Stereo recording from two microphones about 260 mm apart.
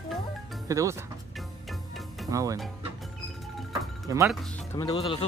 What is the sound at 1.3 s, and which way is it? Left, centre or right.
Music, centre.